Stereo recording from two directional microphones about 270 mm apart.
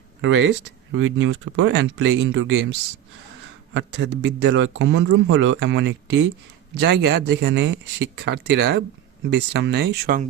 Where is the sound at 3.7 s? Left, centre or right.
Right.